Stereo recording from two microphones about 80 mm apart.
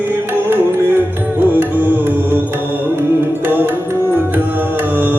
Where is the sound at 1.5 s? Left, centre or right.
Right.